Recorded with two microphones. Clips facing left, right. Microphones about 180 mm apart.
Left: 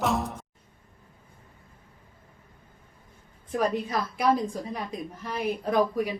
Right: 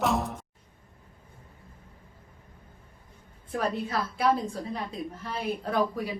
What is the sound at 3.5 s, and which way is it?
A woman's voice, 15° left (ahead or behind).